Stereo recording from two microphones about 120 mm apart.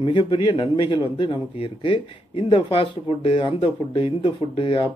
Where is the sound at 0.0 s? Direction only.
45° left (ahead or behind).